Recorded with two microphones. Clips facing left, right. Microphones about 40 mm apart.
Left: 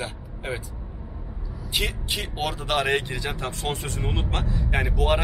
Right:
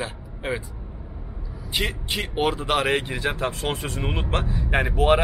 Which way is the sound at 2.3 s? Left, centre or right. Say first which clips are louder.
Right 4 dB; centre.